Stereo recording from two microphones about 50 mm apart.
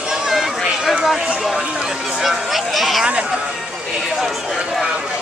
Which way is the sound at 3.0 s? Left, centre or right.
Centre.